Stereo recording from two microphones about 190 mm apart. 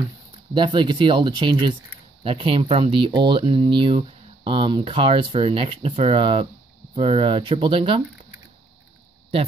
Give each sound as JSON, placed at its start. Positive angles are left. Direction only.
{"t": 0.6, "sound": "speech", "side_deg": -25}